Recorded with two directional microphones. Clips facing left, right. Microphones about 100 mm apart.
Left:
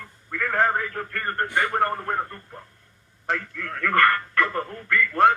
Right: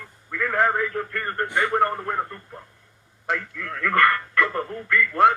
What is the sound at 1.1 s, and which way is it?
Speech, 45° left (ahead or behind).